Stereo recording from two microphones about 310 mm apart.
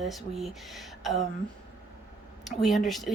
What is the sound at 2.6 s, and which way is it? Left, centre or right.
Speech, centre.